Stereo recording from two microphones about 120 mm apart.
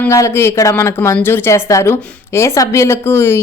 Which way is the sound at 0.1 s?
25° left (ahead or behind).